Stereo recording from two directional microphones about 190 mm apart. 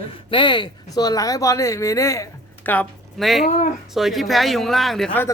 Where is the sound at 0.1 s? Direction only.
25° left (ahead or behind).